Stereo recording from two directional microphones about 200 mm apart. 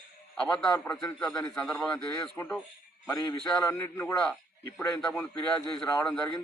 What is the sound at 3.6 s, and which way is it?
A man's voice, 15° left (ahead or behind).